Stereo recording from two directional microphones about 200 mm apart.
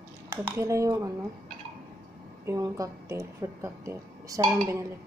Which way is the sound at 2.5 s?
15° right (ahead or behind).